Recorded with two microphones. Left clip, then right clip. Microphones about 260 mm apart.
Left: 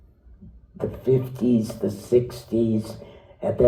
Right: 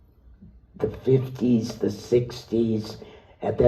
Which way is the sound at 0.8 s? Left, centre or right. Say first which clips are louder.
Even; right.